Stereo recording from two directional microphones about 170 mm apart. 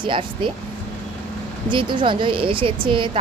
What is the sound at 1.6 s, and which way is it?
A woman's voice, 30° right (ahead or behind).